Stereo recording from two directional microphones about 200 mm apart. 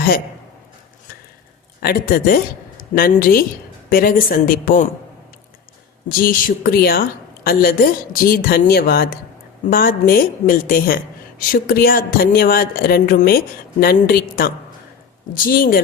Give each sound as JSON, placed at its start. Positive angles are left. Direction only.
{"t": 1.8, "sound": "a woman's voice", "side_deg": 50}
{"t": 6.1, "sound": "a woman's voice", "side_deg": 45}